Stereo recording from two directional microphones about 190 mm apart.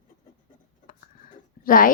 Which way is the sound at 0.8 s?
45° left (ahead or behind).